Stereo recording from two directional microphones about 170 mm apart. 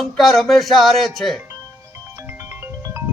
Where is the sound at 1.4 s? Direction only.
20° right (ahead or behind).